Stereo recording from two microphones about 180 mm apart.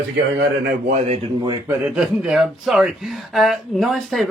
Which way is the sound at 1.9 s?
5° right (ahead or behind).